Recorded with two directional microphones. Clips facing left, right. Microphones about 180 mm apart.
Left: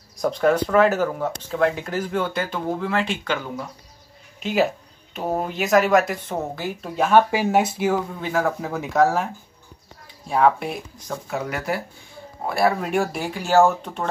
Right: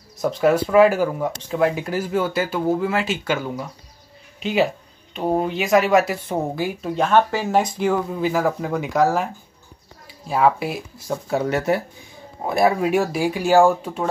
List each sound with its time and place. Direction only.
0.2 s speech: 5° right (ahead or behind)
6.8 s speech: 5° left (ahead or behind)
11.2 s speech: 30° right (ahead or behind)
12.8 s speech: 5° right (ahead or behind)